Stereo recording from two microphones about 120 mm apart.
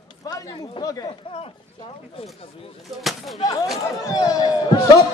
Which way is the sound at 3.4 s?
35° left (ahead or behind).